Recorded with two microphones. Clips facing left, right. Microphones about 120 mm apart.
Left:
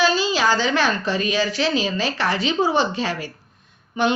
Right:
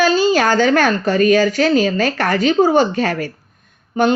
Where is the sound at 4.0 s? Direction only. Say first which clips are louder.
Right 5 dB; 40° right (ahead or behind).